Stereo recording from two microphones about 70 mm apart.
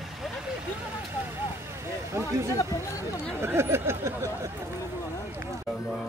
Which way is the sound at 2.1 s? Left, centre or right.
Right.